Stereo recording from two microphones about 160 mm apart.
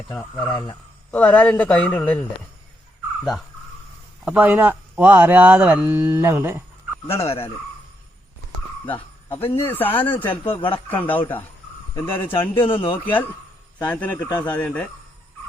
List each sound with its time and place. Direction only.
0.2 s speech: 30° left (ahead or behind)
1.1 s a man's voice: 10° left (ahead or behind)
4.3 s speech: 10° right (ahead or behind)
7.3 s speech: 35° left (ahead or behind)
9.6 s a man's voice: 10° left (ahead or behind)
10.5 s speech: 30° left (ahead or behind)
10.8 s a man's voice: 10° left (ahead or behind)
12.3 s speech: 30° left (ahead or behind)
13.7 s a man's voice: 10° left (ahead or behind)